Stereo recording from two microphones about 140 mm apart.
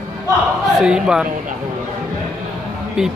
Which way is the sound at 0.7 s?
5° right (ahead or behind).